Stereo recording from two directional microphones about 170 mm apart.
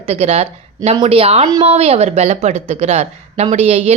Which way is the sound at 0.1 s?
35° right (ahead or behind).